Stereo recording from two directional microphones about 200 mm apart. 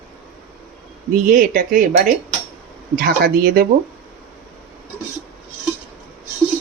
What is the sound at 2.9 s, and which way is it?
Speech, 50° right (ahead or behind).